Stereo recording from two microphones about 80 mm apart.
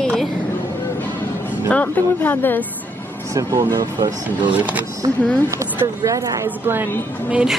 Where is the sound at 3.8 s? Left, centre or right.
Right.